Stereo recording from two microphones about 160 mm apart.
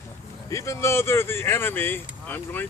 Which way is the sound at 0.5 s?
20° left (ahead or behind).